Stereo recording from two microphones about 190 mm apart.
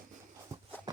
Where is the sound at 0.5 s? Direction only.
15° right (ahead or behind).